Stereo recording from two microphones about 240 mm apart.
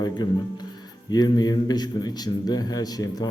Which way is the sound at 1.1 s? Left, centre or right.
Centre.